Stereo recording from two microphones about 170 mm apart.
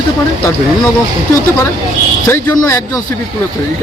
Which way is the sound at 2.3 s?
20° left (ahead or behind).